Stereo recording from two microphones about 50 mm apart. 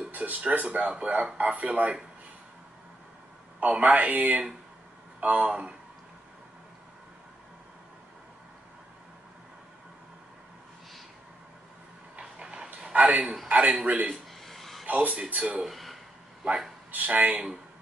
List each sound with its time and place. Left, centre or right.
0.1 s speech: right
3.5 s speech: right
12.2 s a sound: centre
12.9 s a man's voice: right
13.6 s speech: centre
13.8 s speech: right
14.4 s a sound: centre
14.9 s speech: right
15.6 s a sound: centre
16.9 s speech: right
17.3 s speech: centre